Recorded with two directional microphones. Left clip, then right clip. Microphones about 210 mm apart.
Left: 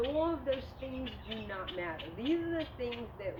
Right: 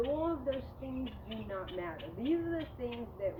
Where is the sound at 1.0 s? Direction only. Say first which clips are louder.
Left 2 dB; 45° right (ahead or behind).